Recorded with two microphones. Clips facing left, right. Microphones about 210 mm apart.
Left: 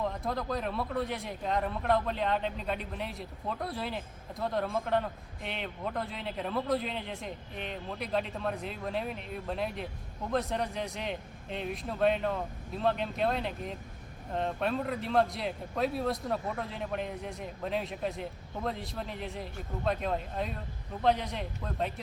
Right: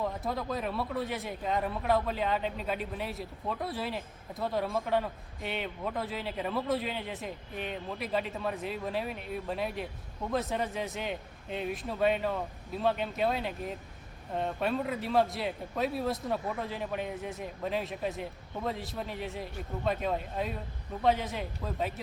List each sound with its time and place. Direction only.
0.0 s speech: centre (ahead or behind)